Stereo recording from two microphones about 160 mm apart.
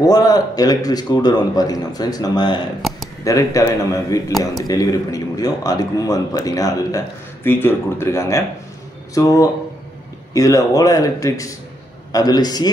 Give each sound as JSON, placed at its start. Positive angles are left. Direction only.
{"t": 0.0, "sound": "a man's voice", "side_deg": 25}